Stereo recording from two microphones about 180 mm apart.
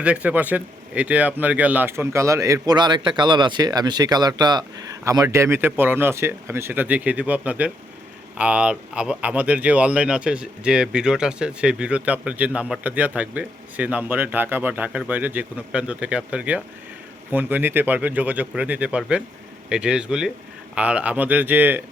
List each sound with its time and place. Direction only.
0.0 s speech: 5° right (ahead or behind)